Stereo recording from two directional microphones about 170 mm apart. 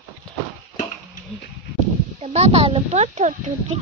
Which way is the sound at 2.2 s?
40° right (ahead or behind).